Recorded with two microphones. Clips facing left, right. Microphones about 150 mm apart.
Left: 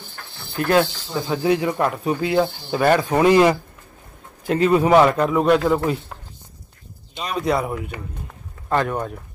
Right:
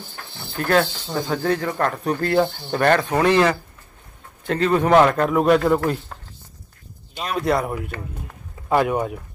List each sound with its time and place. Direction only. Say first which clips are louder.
0.6 s speech: left 2 dB; 35° right (ahead or behind)
1.2 s speech: left 3 dB; 5° left (ahead or behind)
7.2 s speech: even; centre (ahead or behind)